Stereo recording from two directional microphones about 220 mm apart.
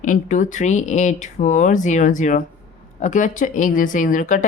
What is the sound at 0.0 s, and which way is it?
A woman's voice, 35° left (ahead or behind).